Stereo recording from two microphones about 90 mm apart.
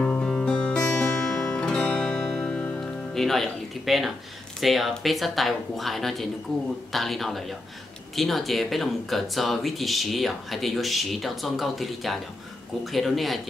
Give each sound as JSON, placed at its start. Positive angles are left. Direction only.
{"t": 0.0, "sound": "music", "side_deg": 15}
{"t": 3.2, "sound": "speech", "side_deg": 0}